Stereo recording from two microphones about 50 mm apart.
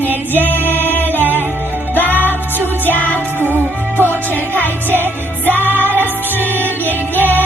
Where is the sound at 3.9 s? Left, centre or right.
Left.